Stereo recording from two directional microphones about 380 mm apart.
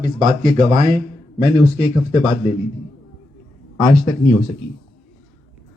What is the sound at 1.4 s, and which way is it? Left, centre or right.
Speech, centre.